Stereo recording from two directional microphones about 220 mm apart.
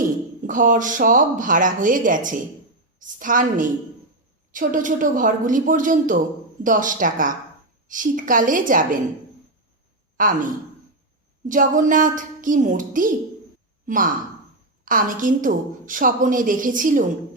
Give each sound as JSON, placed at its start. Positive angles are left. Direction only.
{"t": 0.0, "sound": "a woman's voice", "side_deg": -35}
{"t": 10.2, "sound": "a woman's voice", "side_deg": -40}